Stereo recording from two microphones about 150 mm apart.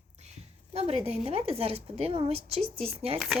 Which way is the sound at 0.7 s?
45° right (ahead or behind).